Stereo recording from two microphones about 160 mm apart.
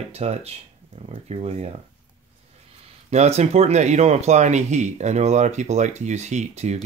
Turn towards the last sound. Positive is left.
turn(degrees=-45)  # may be behind; listen again after turning